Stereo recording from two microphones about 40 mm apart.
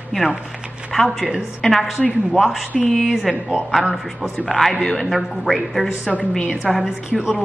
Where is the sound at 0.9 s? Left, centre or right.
Centre.